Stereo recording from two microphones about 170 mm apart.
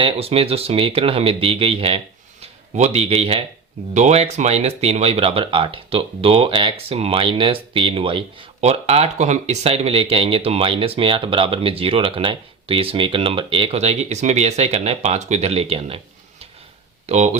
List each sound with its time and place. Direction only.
0.0 s speech: 35° right (ahead or behind)
17.1 s speech: 40° right (ahead or behind)